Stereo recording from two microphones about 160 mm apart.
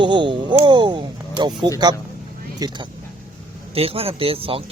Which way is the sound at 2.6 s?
25° right (ahead or behind).